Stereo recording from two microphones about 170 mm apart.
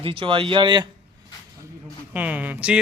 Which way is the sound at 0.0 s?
30° right (ahead or behind).